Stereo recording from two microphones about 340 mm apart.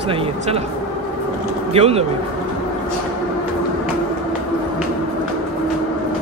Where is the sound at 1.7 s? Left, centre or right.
Centre.